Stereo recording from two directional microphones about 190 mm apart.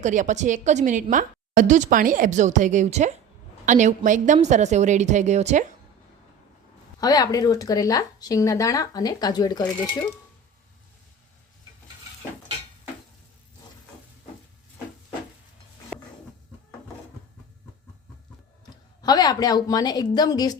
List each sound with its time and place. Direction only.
0.0 s a woman's voice: 40° right (ahead or behind)
7.0 s speech: 20° left (ahead or behind)
19.0 s speech: 20° left (ahead or behind)